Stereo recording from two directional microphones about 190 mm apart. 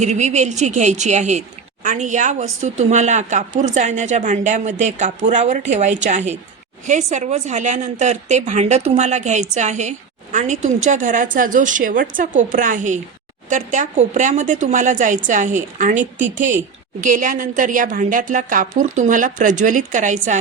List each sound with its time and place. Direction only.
0.0 s a woman's voice: 35° right (ahead or behind)